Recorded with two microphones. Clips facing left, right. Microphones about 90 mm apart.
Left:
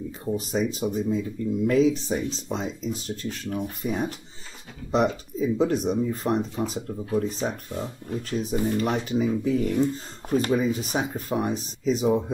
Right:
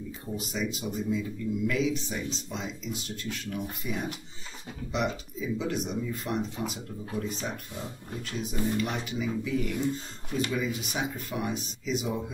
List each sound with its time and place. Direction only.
0.3 s speech: 40° left (ahead or behind)